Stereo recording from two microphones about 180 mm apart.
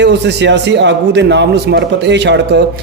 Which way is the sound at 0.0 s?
75° right (ahead or behind).